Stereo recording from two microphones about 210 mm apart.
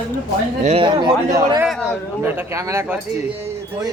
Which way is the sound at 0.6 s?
30° right (ahead or behind).